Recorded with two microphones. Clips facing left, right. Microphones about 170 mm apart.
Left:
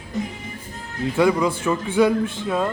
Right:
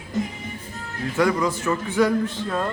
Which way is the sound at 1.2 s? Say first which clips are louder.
Left 2 dB; 15° left (ahead or behind).